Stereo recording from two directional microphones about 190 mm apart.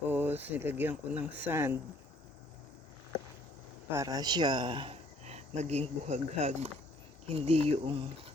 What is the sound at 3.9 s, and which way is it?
Speech, 15° right (ahead or behind).